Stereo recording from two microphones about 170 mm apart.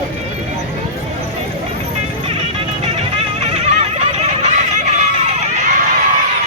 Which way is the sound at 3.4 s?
40° right (ahead or behind).